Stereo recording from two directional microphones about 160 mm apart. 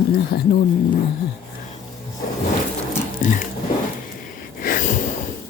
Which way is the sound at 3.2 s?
60° left (ahead or behind).